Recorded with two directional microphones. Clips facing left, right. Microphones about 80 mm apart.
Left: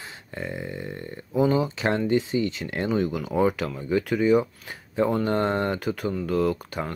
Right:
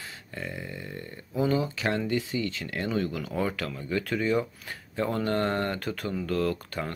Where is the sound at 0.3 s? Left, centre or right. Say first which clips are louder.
Left 5 dB; left.